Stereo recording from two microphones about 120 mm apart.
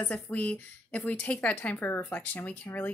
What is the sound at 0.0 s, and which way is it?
A woman's voice, 15° left (ahead or behind).